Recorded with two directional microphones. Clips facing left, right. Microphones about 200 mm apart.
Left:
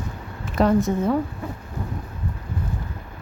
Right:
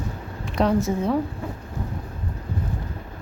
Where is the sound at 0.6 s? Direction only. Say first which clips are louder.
Left 2 dB; centre (ahead or behind).